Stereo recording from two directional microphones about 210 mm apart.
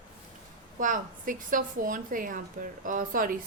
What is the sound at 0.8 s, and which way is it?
A woman's voice, 40° right (ahead or behind).